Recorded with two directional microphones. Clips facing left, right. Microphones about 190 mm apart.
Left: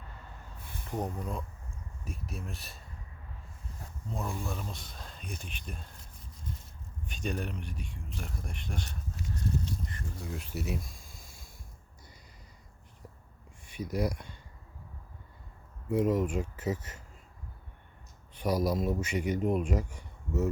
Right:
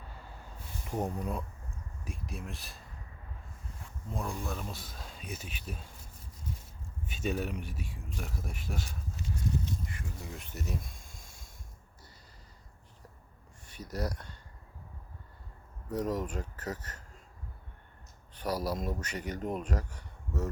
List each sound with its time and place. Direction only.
0.9 s speech: 10° right (ahead or behind)
2.0 s speech: centre (ahead or behind)
4.1 s speech: centre (ahead or behind)
7.0 s speech: 5° right (ahead or behind)
11.1 s snort: 45° right (ahead or behind)
13.7 s speech: 10° left (ahead or behind)
15.9 s speech: 10° left (ahead or behind)
18.3 s speech: 10° left (ahead or behind)